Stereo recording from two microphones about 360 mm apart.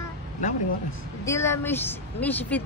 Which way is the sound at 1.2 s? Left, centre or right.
Centre.